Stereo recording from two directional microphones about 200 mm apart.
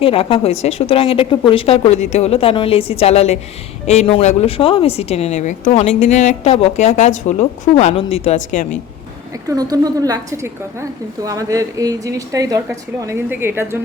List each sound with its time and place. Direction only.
0.0 s a woman's voice: 25° left (ahead or behind)
9.5 s a woman's voice: 20° right (ahead or behind)